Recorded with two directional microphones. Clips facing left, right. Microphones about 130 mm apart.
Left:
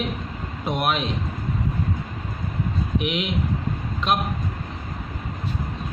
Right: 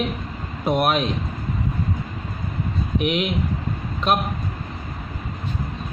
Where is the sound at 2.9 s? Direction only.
45° right (ahead or behind).